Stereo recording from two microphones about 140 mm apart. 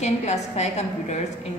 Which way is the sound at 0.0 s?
55° left (ahead or behind).